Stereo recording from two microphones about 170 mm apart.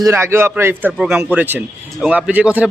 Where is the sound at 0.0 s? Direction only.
15° right (ahead or behind).